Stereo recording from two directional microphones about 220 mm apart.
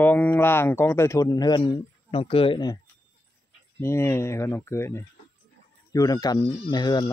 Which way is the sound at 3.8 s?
10° left (ahead or behind).